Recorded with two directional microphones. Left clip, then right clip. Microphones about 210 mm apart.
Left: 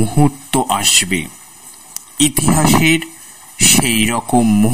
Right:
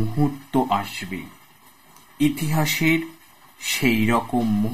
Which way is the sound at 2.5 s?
45° left (ahead or behind).